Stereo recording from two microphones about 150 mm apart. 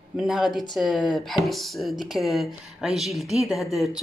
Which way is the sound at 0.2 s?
Centre (ahead or behind).